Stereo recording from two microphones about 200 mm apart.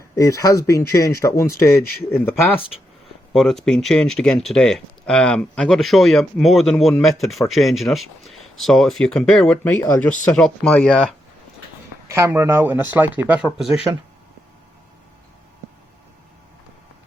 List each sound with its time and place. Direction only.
0.2 s speech: 15° left (ahead or behind)
3.3 s speech: centre (ahead or behind)
12.0 s speech: 15° right (ahead or behind)